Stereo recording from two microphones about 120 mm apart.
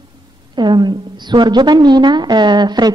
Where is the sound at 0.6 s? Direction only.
40° right (ahead or behind).